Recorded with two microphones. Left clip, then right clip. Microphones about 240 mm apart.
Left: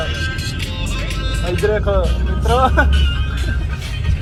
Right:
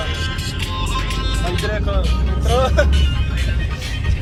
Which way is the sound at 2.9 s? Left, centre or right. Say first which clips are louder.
Left 2 dB; right.